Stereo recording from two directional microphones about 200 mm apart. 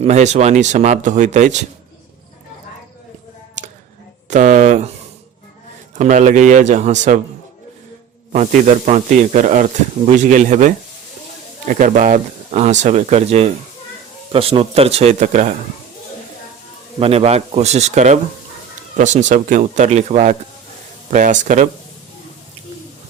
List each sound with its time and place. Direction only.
0.0 s speech: 35° right (ahead or behind)
4.3 s a sound: 40° right (ahead or behind)
6.0 s speech: 40° right (ahead or behind)
8.3 s speech: 40° right (ahead or behind)
11.7 s speech: 40° right (ahead or behind)
17.0 s speech: 30° right (ahead or behind)